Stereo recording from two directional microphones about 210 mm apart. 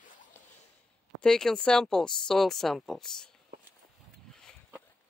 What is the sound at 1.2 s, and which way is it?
Speech, 5° left (ahead or behind).